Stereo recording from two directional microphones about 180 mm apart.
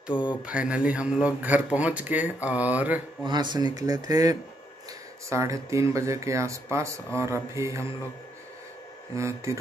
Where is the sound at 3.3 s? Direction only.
25° right (ahead or behind).